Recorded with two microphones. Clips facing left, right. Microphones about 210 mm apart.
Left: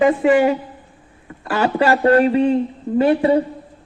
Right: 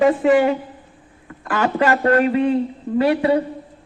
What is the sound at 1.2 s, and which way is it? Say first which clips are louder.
A man's voice: left 1 dB; 30° left (ahead or behind).